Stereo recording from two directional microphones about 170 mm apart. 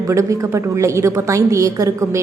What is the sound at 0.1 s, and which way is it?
A woman's voice, 20° right (ahead or behind).